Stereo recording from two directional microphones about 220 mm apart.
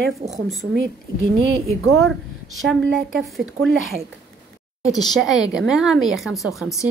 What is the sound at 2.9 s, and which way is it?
Speech, 50° right (ahead or behind).